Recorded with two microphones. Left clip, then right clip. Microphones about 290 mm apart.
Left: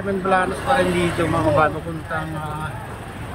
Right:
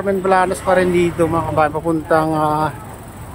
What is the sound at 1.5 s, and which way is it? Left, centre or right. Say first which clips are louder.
Speech: right 3 dB; centre.